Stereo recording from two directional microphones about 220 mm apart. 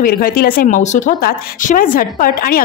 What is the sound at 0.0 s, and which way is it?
A woman's voice, 40° left (ahead or behind).